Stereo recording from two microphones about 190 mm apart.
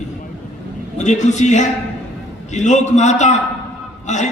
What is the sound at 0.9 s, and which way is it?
A man's voice, 40° left (ahead or behind).